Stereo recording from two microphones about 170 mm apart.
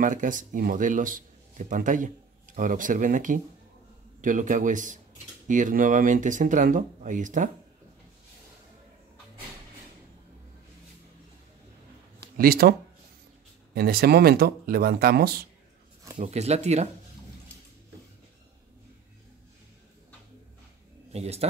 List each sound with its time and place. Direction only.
0.0 s a man's voice: 50° right (ahead or behind)
12.4 s speech: 60° right (ahead or behind)
13.7 s speech: 65° right (ahead or behind)
16.2 s speech: 40° right (ahead or behind)
21.1 s speech: 40° right (ahead or behind)